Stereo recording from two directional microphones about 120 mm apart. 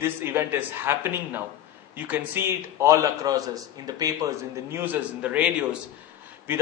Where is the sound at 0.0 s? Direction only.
20° right (ahead or behind).